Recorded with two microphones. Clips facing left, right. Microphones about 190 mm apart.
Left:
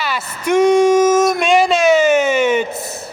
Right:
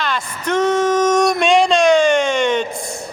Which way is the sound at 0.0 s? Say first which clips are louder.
Left 1 dB; 10° left (ahead or behind).